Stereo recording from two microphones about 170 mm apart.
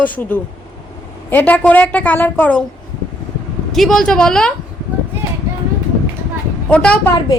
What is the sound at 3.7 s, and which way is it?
Speech, centre (ahead or behind).